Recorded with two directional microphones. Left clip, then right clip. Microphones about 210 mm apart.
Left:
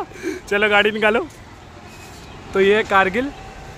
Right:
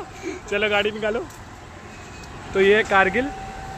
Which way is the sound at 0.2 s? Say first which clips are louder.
Left 4 dB; 25° left (ahead or behind).